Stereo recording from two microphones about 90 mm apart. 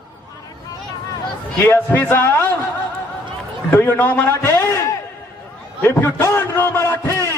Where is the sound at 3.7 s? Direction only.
20° left (ahead or behind).